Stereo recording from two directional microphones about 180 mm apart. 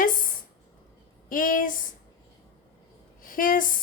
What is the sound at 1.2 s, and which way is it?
Speech, 50° left (ahead or behind).